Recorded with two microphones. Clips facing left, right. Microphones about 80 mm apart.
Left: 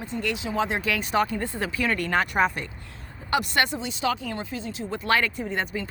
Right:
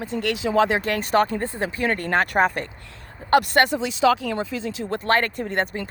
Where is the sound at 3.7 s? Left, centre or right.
Right.